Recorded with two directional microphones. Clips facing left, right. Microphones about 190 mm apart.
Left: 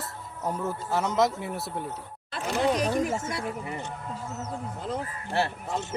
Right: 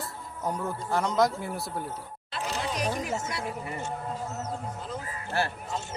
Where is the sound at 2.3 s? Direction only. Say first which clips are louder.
Left 7 dB; 55° left (ahead or behind).